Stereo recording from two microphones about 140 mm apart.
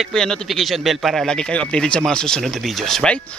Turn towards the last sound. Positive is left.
turn(degrees=5)  # may be behind; listen again after turning